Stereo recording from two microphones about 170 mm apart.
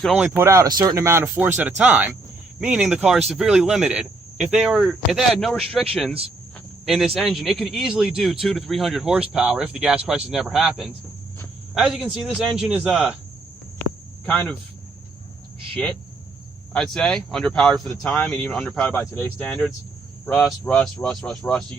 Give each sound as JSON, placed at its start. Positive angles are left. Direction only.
{"t": 0.0, "sound": "speech", "side_deg": 5}
{"t": 0.3, "sound": "speech", "side_deg": -15}
{"t": 16.7, "sound": "speech", "side_deg": 0}